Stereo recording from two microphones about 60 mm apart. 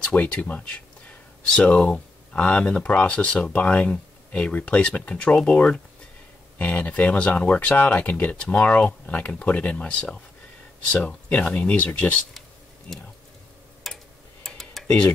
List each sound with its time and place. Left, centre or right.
0.0 s speech: left
13.9 s tick-tock: centre
14.4 s typing: centre